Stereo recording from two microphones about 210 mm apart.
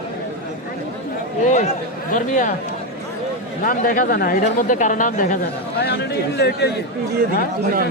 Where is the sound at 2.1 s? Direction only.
40° left (ahead or behind).